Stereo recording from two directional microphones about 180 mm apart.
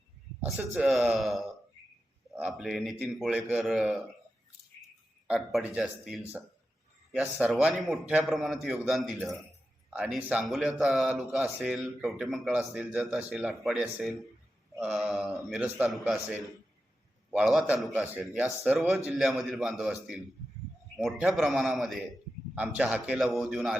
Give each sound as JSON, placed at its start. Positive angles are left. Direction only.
{"t": 0.5, "sound": "a man's voice", "side_deg": -5}
{"t": 5.3, "sound": "a man's voice", "side_deg": 0}